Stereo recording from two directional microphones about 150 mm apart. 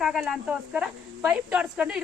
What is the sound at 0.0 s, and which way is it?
Speech, 5° right (ahead or behind).